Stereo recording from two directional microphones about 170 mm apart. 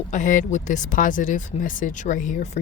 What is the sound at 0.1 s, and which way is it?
Speech, 50° left (ahead or behind).